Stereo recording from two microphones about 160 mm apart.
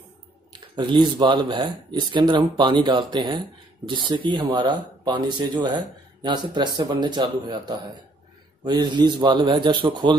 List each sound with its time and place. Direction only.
0.5 s speech: 30° right (ahead or behind)